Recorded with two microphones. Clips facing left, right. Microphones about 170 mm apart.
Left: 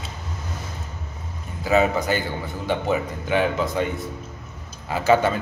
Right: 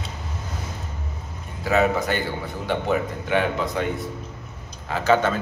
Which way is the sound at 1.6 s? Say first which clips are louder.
Left 1 dB; centre (ahead or behind).